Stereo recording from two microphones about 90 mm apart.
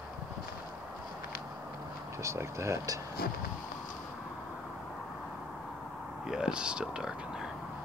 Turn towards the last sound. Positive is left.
turn(degrees=-10)  # may be behind; listen again after turning